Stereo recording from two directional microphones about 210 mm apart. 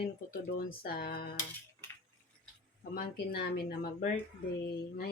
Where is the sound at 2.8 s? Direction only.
45° left (ahead or behind).